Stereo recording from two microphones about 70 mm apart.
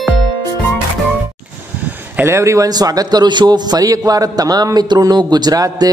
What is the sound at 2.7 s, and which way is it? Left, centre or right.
A man's voice, right.